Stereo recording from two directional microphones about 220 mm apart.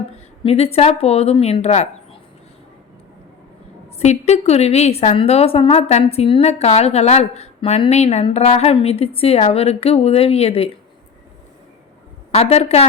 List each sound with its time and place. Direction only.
0.4 s a woman's voice: 25° left (ahead or behind)
3.9 s a woman's voice: 30° left (ahead or behind)
12.3 s a woman's voice: 30° left (ahead or behind)